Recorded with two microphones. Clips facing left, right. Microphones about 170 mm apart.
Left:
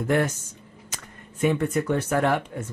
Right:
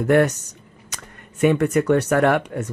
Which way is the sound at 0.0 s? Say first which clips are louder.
Right 6 dB; 70° right (ahead or behind).